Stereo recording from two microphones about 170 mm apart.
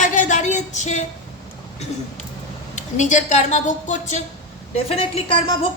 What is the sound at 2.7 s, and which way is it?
A woman's voice, 45° left (ahead or behind).